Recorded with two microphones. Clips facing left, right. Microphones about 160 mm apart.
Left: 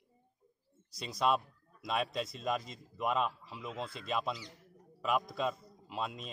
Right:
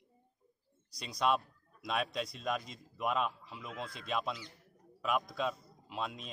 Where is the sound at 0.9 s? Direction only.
Centre (ahead or behind).